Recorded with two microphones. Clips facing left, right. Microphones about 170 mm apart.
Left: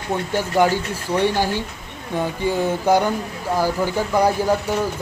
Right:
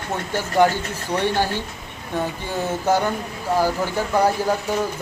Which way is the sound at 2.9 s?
15° left (ahead or behind).